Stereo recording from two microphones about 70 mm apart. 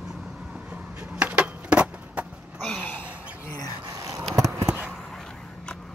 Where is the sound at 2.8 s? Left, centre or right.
Left.